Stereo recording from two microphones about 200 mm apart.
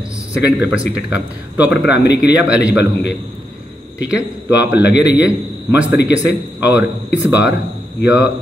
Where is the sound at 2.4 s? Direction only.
5° right (ahead or behind).